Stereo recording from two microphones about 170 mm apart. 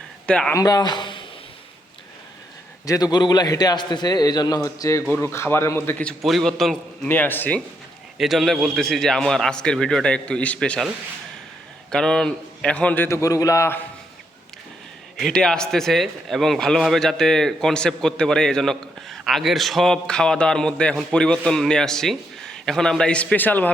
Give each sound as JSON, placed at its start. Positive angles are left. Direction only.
{"t": 0.3, "sound": "a man's voice", "side_deg": 5}
{"t": 0.5, "sound": "speech", "side_deg": 20}
{"t": 2.8, "sound": "a man's voice", "side_deg": 20}
{"t": 8.2, "sound": "a man's voice", "side_deg": 0}
{"t": 15.2, "sound": "a man's voice", "side_deg": 5}